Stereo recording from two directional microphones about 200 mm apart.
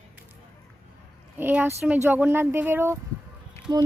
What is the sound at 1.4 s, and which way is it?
A woman's voice, 10° right (ahead or behind).